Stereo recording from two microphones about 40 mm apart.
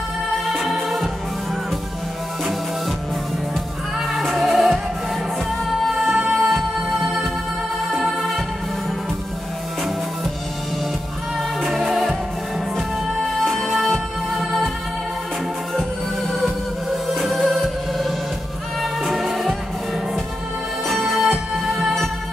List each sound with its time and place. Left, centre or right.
0.5 s music: centre
4.1 s music: centre
6.2 s music: centre
11.6 s music: centre
13.2 s music: centre
16.3 s music: centre
20.9 s music: centre
21.6 s music: centre